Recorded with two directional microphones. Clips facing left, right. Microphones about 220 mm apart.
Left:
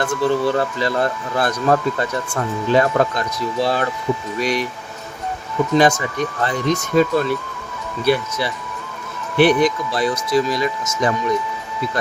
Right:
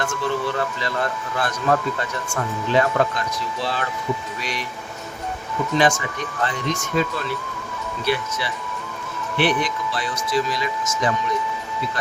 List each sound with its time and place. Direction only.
0.0 s speech: 35° left (ahead or behind)
5.7 s speech: 40° left (ahead or behind)